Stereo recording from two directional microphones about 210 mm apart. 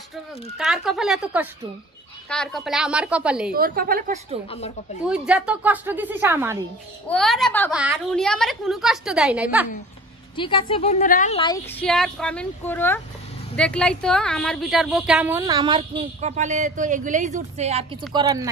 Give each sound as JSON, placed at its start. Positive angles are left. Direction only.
{"t": 0.6, "sound": "a woman's voice", "side_deg": 0}
{"t": 3.5, "sound": "a woman's voice", "side_deg": -45}
{"t": 4.5, "sound": "a woman's voice", "side_deg": 30}
{"t": 5.0, "sound": "a woman's voice", "side_deg": -5}
{"t": 7.1, "sound": "a woman's voice", "side_deg": 0}
{"t": 7.7, "sound": "a woman's voice", "side_deg": -5}
{"t": 10.3, "sound": "a woman's voice", "side_deg": 25}
{"t": 11.3, "sound": "a woman's voice", "side_deg": 20}
{"t": 11.7, "sound": "a woman's voice", "side_deg": 5}
{"t": 18.1, "sound": "a woman's voice", "side_deg": -15}